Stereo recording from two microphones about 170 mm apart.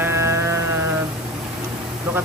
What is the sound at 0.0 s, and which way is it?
Music, 15° right (ahead or behind).